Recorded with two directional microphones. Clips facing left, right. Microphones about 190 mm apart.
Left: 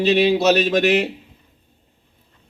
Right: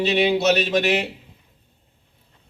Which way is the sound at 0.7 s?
55° left (ahead or behind).